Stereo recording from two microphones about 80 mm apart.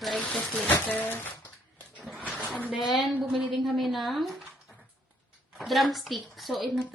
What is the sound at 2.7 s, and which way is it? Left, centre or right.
Speech, centre.